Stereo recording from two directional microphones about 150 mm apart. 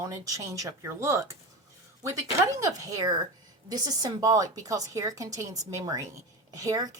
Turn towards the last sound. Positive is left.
turn(degrees=-20)  # may be behind; listen again after turning